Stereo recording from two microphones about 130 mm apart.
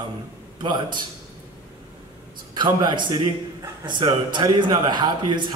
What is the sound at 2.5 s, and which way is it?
A man's voice, 35° right (ahead or behind).